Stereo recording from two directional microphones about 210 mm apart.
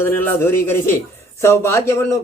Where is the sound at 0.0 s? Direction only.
10° left (ahead or behind).